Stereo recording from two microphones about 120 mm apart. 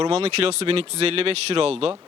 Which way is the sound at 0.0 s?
55° right (ahead or behind).